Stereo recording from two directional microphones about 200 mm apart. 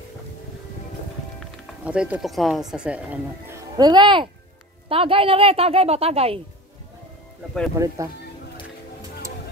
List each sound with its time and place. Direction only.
1.9 s speech: 5° right (ahead or behind); by 6.4 s 30° right (ahead or behind)
7.7 s speech: 15° right (ahead or behind)